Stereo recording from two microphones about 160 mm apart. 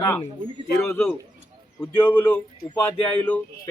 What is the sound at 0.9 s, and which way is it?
Speech, 15° left (ahead or behind).